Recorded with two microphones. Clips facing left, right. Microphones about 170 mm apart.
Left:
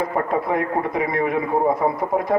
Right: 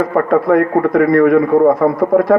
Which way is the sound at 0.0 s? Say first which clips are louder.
Right 8 dB; 60° right (ahead or behind).